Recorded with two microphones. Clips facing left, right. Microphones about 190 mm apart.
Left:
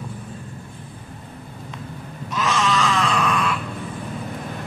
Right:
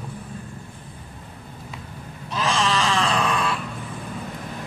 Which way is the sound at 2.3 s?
30° right (ahead or behind).